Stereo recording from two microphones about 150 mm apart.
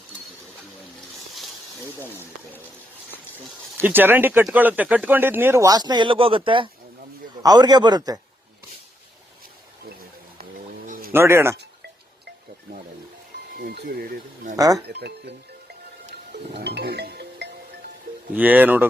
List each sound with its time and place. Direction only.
3.8 s a man's voice: 15° right (ahead or behind)
10.8 s a sound: 65° right (ahead or behind)
11.1 s speech: 15° right (ahead or behind)
13.6 s speech: 90° right
14.5 s a man's voice: 25° right (ahead or behind)
14.8 s speech: 90° right
16.3 s speech: 90° right
18.3 s speech: 10° right (ahead or behind)